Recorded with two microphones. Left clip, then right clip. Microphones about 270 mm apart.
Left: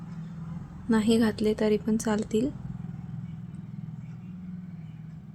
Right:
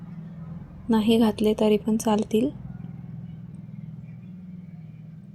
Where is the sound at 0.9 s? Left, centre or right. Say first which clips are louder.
Right 3 dB; centre.